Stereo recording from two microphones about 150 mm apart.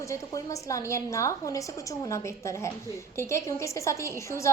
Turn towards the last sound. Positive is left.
turn(degrees=20)  # may be behind; listen again after turning